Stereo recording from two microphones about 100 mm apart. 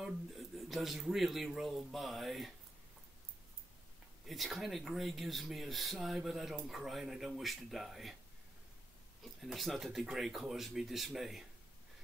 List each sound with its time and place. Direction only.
0.0 s speech: centre (ahead or behind)
4.3 s speech: centre (ahead or behind)
9.2 s speech: centre (ahead or behind)